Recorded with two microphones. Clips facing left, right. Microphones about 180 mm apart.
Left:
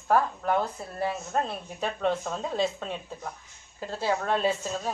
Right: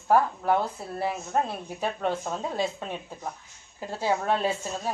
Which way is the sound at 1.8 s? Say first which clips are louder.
Left 1 dB; 10° right (ahead or behind).